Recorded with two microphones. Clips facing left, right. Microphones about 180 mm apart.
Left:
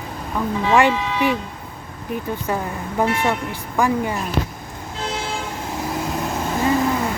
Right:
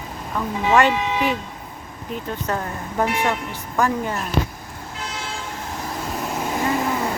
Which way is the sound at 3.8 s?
10° left (ahead or behind).